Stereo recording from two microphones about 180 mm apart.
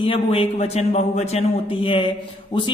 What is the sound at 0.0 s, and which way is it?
A man's voice, 30° left (ahead or behind).